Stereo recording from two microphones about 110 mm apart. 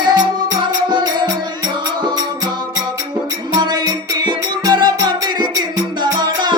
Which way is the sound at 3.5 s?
40° right (ahead or behind).